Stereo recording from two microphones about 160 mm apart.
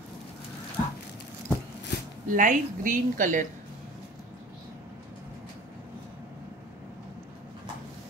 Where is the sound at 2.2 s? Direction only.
55° right (ahead or behind).